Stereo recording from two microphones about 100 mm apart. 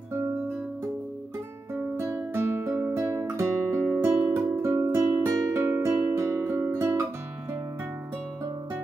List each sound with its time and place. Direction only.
2.0 s music: 20° right (ahead or behind)
3.9 s music: 15° right (ahead or behind)
4.7 s music: 35° right (ahead or behind)